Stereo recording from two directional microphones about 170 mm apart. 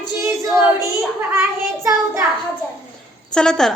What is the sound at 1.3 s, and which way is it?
Child singing, 15° right (ahead or behind).